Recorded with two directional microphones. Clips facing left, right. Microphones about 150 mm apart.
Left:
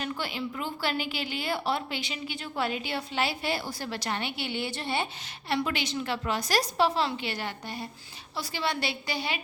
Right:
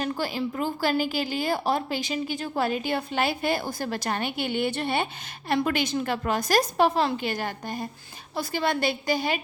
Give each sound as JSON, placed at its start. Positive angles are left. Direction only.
{"t": 0.0, "sound": "a woman's voice", "side_deg": -40}